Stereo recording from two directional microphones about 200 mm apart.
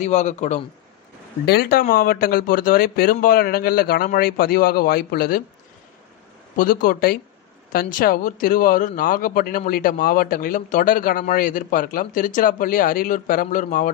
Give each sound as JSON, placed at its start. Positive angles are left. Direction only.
{"t": 0.0, "sound": "a man's voice", "side_deg": 35}
{"t": 1.4, "sound": "a man's voice", "side_deg": 50}
{"t": 6.5, "sound": "a man's voice", "side_deg": 45}